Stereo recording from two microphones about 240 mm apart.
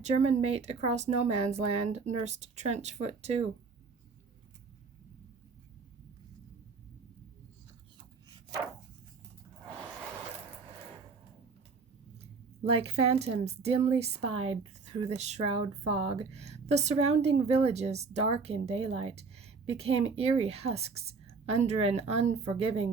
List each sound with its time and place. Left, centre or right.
0.0 s a woman's voice: right
12.2 s a woman's voice: right